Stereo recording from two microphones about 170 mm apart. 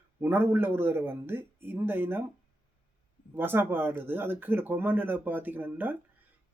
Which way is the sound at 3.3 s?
10° right (ahead or behind).